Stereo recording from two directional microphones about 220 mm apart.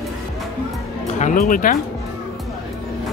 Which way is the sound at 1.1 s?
35° left (ahead or behind).